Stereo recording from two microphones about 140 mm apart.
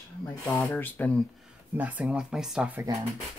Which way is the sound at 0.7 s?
15° left (ahead or behind).